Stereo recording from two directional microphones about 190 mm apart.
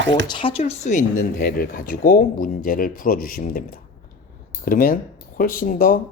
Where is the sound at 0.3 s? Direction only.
25° left (ahead or behind).